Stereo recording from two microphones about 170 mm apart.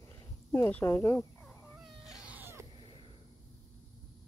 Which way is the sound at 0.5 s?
15° left (ahead or behind).